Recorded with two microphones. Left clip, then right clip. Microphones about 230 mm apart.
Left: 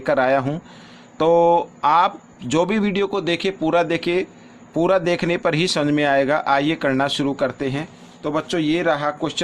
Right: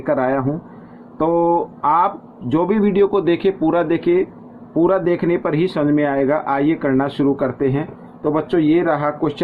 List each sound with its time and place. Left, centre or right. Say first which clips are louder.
0.0 s speech: even; left